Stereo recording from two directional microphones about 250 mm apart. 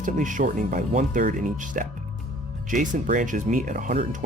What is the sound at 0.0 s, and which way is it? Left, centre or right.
Speech, right.